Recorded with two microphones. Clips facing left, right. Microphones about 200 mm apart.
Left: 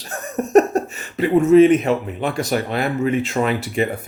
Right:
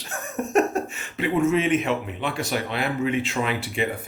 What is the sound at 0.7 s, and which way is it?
Speech, 35° left (ahead or behind).